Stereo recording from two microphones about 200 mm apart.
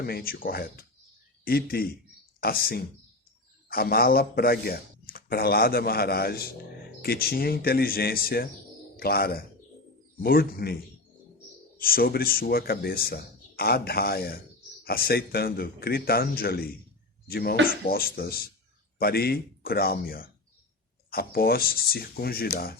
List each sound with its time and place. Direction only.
0.0 s speech: 50° left (ahead or behind)
11.8 s speech: 45° left (ahead or behind)